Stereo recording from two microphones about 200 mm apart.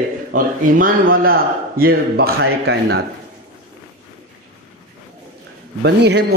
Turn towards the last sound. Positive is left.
turn(degrees=-55)  # may be behind; listen again after turning